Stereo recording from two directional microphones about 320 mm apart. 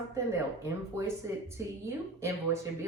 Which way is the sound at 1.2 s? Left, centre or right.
Centre.